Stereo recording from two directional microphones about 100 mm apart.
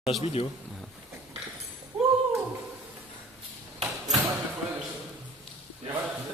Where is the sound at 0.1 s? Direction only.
Centre (ahead or behind).